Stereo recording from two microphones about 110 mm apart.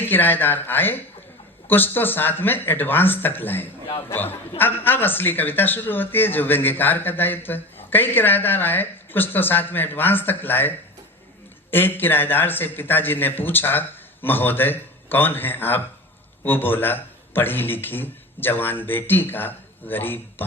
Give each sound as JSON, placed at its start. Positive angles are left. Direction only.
{"t": 0.0, "sound": "a man's voice", "side_deg": 15}